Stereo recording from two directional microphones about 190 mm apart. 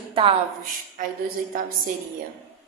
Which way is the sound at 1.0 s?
45° right (ahead or behind).